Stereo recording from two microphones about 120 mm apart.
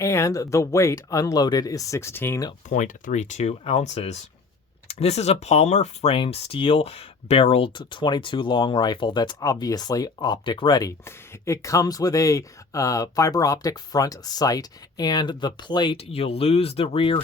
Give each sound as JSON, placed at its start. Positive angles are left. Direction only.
{"t": 0.0, "sound": "speech", "side_deg": 25}
{"t": 2.6, "sound": "speech", "side_deg": 90}
{"t": 6.1, "sound": "speech", "side_deg": 50}
{"t": 7.8, "sound": "speech", "side_deg": 40}
{"t": 16.0, "sound": "speech", "side_deg": 55}